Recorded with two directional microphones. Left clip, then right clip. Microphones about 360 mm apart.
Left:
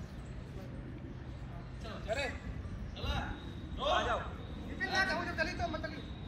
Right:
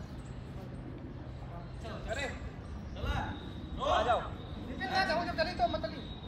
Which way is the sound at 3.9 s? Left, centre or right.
Right.